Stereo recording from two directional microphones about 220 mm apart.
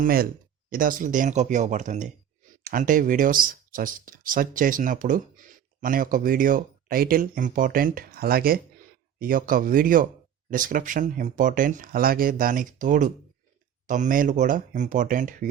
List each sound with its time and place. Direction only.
0.0 s speech: 40° right (ahead or behind)